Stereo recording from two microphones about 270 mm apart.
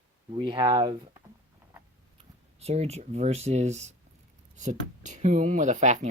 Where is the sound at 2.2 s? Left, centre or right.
Right.